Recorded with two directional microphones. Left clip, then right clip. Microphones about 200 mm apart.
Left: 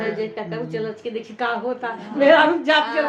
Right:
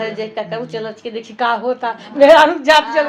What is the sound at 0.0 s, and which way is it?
A woman's voice, 35° right (ahead or behind).